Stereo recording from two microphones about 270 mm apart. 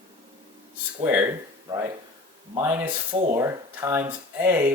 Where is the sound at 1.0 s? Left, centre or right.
Centre.